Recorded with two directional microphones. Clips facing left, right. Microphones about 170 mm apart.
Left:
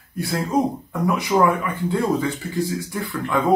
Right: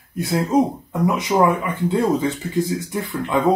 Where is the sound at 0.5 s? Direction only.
20° right (ahead or behind).